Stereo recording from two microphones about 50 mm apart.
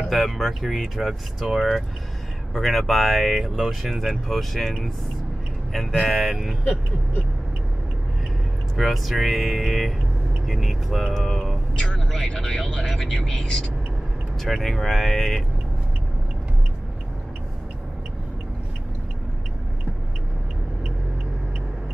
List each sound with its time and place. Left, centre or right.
0.1 s speech: centre
6.6 s speech: left
8.7 s speech: centre
11.7 s speech: centre
12.1 s speech: centre
14.4 s speech: centre